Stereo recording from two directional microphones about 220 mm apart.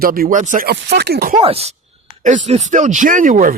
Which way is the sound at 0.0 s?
40° right (ahead or behind).